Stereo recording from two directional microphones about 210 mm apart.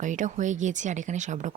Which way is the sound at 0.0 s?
35° right (ahead or behind).